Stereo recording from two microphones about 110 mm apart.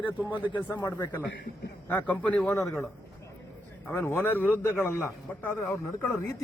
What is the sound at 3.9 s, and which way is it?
A man's voice, 20° left (ahead or behind).